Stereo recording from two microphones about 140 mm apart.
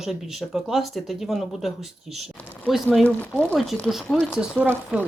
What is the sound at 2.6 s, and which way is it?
Speech, centre (ahead or behind).